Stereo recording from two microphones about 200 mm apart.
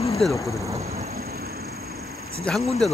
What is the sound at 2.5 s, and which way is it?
Speech, 5° left (ahead or behind).